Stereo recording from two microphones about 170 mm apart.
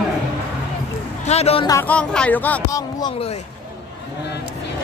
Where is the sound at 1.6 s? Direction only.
10° left (ahead or behind).